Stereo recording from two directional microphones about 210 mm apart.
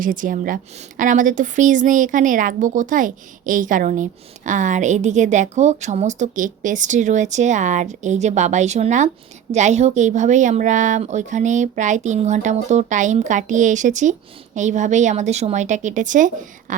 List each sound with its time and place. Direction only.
0.0 s a woman's voice: 40° right (ahead or behind)